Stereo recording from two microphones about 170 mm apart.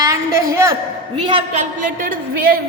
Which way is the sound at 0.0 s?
15° right (ahead or behind).